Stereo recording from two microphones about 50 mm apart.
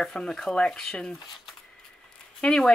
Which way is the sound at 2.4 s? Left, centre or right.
Centre.